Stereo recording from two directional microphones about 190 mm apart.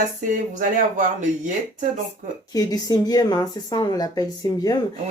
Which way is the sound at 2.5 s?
20° left (ahead or behind).